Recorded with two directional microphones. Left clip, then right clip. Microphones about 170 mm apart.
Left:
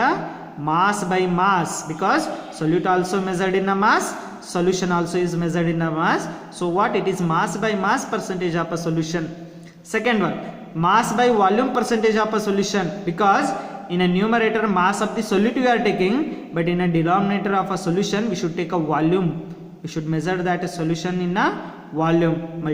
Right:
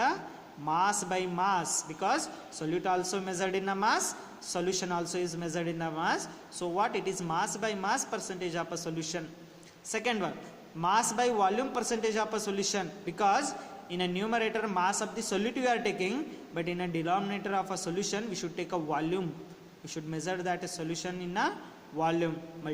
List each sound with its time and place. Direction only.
0.6 s speech: 25° right (ahead or behind)